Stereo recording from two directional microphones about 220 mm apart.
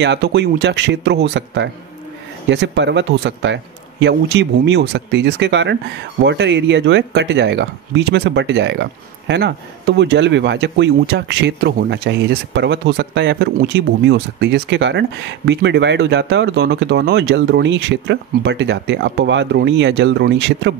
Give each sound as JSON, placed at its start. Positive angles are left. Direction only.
{"t": 0.0, "sound": "speech", "side_deg": -50}